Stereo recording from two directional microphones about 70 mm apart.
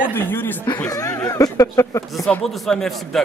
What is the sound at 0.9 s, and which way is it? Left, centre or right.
Speech, left.